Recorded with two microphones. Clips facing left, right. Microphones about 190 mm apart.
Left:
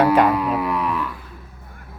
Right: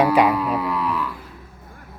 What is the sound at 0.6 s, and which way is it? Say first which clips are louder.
Music: left 1 dB; 20° left (ahead or behind).